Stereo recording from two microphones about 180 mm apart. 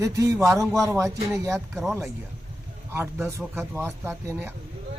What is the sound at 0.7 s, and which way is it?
Speech, centre (ahead or behind).